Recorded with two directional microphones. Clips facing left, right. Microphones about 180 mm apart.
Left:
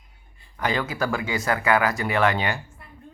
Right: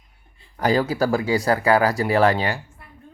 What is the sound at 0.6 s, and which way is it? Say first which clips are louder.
Speech: right 6 dB; 35° right (ahead or behind).